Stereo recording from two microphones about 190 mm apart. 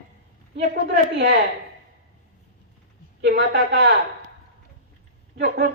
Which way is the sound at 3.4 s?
65° right (ahead or behind).